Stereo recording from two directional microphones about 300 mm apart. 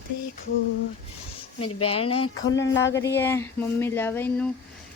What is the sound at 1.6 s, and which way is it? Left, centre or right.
Speech, left.